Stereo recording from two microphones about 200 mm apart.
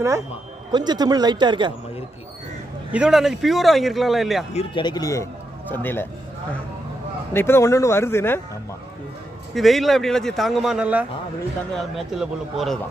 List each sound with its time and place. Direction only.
0.7 s speech: 20° right (ahead or behind)
2.9 s a man's voice: 5° right (ahead or behind)
4.6 s a man's voice: 25° left (ahead or behind)
7.3 s speech: 10° left (ahead or behind)
9.5 s a man's voice: centre (ahead or behind)